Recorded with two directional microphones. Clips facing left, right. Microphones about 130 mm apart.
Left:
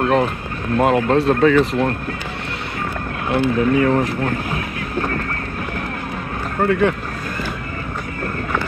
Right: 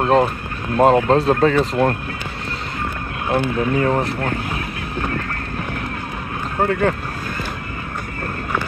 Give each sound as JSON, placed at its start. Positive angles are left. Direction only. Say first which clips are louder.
{"t": 0.0, "sound": "speech", "louder": "right 1 dB", "side_deg": -35}
{"t": 3.3, "sound": "speech", "louder": "left 2 dB", "side_deg": -30}
{"t": 6.6, "sound": "speech", "louder": "left 1 dB", "side_deg": -35}